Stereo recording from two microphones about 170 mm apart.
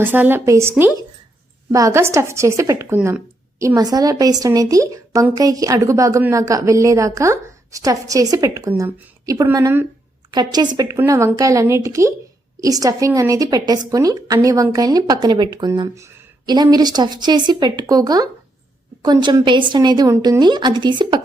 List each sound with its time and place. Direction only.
0.0 s speech: 10° right (ahead or behind)
1.7 s a woman's voice: 15° right (ahead or behind)